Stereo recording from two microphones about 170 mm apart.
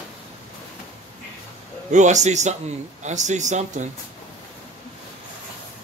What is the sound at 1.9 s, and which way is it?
Speech, 45° right (ahead or behind).